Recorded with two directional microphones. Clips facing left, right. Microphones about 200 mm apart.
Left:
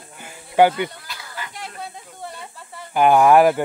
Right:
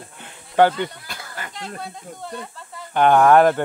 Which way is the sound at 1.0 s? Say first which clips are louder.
Even; 50° right (ahead or behind).